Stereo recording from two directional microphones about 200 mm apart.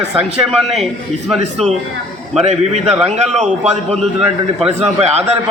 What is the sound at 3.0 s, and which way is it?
Speech, 30° right (ahead or behind).